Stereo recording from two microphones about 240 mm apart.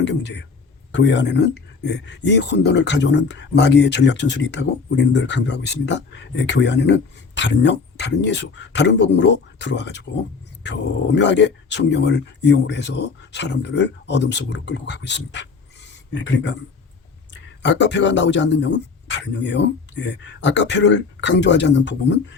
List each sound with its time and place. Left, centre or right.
0.0 s speech: left